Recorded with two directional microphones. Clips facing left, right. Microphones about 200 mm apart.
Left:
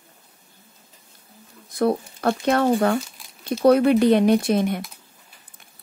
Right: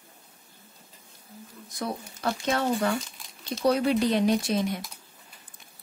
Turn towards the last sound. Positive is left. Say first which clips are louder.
# left 6 dB
turn(degrees=60)  # may be behind; listen again after turning